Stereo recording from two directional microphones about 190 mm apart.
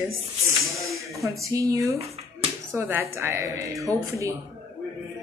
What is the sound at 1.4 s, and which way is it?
A woman's voice, 15° right (ahead or behind).